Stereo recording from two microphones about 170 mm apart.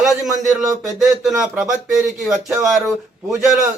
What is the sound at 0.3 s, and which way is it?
Speech, 20° right (ahead or behind).